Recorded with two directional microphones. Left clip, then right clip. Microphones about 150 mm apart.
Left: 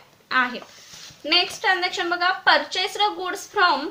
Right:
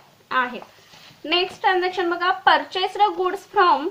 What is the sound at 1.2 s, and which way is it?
A woman's voice, 30° right (ahead or behind).